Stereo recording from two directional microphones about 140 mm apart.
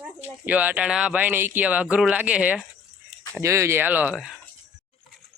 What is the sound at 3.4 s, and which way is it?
Speech, 20° right (ahead or behind).